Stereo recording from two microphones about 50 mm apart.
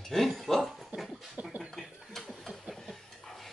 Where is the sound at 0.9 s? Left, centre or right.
Right.